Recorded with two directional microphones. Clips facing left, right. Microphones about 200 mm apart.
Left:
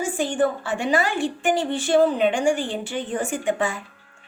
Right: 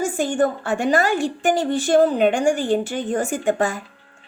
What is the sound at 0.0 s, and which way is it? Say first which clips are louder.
A woman's voice: right 2 dB; 45° right (ahead or behind).